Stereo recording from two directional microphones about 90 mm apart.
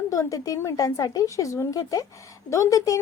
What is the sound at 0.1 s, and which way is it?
A woman's voice, 40° left (ahead or behind).